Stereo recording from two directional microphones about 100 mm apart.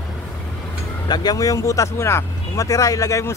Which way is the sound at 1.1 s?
40° left (ahead or behind).